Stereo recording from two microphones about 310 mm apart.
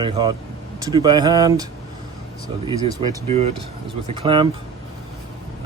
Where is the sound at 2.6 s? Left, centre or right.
Centre.